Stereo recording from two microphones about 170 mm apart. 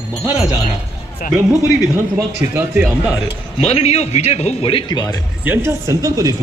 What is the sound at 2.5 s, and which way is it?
Speech, 5° right (ahead or behind).